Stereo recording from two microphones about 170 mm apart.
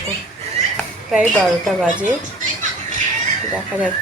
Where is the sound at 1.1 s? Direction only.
5° right (ahead or behind).